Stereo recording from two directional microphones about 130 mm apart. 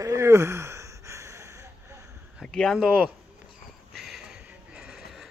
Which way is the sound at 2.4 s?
5° left (ahead or behind).